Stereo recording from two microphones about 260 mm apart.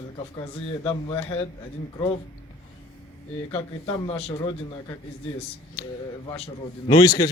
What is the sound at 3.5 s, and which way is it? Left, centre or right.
Speech, left.